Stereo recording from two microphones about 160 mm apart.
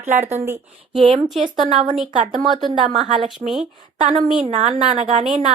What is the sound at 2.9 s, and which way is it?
Speech, 35° right (ahead or behind).